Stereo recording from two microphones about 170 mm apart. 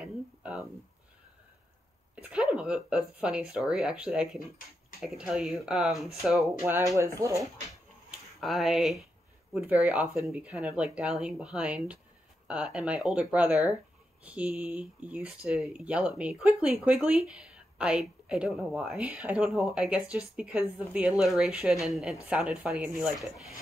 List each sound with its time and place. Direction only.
0.0 s a sound: 5° right (ahead or behind)
2.2 s speech: 5° right (ahead or behind)
7.0 s speech: 20° right (ahead or behind)
8.4 s speech: centre (ahead or behind)